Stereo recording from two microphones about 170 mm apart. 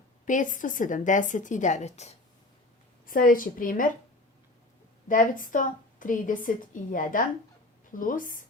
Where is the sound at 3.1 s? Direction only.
55° left (ahead or behind).